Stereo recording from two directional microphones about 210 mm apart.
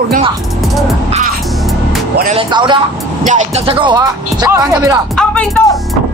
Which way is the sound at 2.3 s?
20° right (ahead or behind).